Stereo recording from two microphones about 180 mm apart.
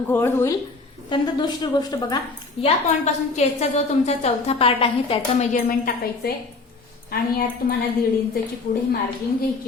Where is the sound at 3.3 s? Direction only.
40° left (ahead or behind).